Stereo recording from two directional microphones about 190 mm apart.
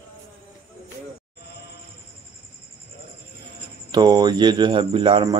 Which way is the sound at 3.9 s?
20° right (ahead or behind).